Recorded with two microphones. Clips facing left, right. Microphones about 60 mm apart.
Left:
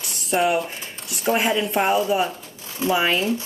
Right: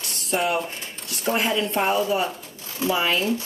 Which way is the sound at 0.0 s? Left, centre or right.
Centre.